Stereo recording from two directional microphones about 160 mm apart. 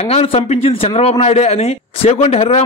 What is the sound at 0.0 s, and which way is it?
Speech, 40° left (ahead or behind).